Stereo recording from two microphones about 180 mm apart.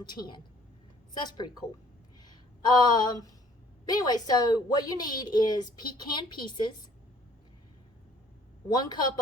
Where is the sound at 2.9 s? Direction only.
25° left (ahead or behind).